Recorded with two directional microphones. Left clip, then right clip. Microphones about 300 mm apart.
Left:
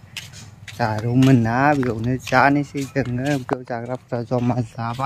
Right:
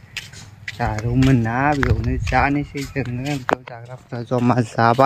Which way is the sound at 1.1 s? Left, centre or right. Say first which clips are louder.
Left 2 dB; centre.